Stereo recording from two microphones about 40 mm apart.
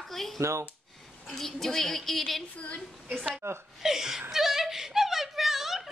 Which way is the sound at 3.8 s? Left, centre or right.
Centre.